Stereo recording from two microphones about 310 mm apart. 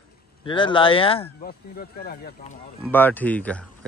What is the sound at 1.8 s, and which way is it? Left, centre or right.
Speech, left.